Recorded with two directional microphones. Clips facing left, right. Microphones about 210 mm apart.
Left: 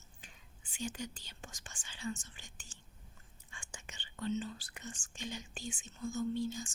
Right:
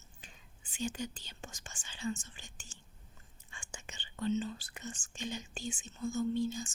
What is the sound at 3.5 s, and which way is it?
Whispering, 25° right (ahead or behind).